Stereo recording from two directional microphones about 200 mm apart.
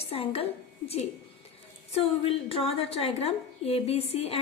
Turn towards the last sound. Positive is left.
turn(degrees=30)  # may be behind; listen again after turning